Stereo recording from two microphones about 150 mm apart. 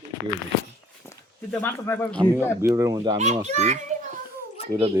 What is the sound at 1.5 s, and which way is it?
Speech, 10° left (ahead or behind).